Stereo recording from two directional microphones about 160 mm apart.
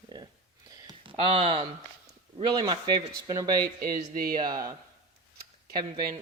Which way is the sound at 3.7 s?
65° right (ahead or behind).